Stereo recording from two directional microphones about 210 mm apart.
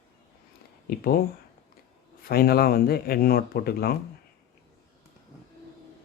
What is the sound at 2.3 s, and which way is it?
Speech, 45° left (ahead or behind).